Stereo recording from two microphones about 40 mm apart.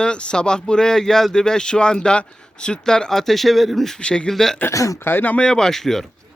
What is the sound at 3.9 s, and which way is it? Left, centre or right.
Speech, left.